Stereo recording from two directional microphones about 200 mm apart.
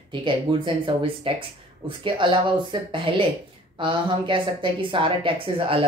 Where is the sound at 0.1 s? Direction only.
25° right (ahead or behind).